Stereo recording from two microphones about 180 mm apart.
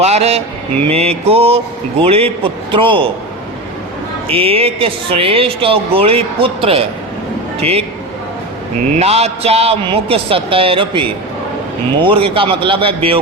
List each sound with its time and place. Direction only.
0.0 s speech: 35° right (ahead or behind)
4.3 s speech: 30° right (ahead or behind)
9.0 s a man's voice: 35° right (ahead or behind)